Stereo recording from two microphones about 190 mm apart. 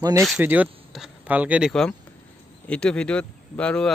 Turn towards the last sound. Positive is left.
turn(degrees=5)  # may be behind; listen again after turning